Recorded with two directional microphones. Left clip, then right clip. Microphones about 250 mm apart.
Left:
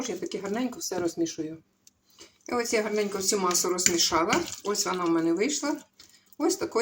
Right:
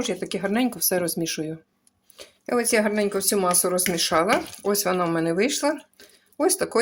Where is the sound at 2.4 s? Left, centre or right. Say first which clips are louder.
Right 5 dB; right.